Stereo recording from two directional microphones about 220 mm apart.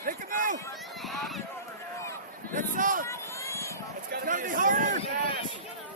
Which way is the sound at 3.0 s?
10° left (ahead or behind).